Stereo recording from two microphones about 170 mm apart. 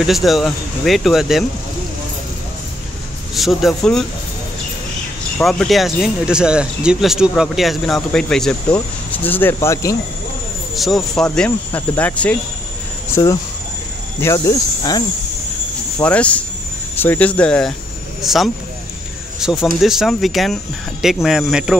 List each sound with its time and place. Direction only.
0.0 s speech: centre (ahead or behind)
3.3 s speech: centre (ahead or behind)
5.4 s speech: centre (ahead or behind)
10.8 s speech: centre (ahead or behind)
13.1 s speech: 20° left (ahead or behind)
16.0 s speech: 10° left (ahead or behind)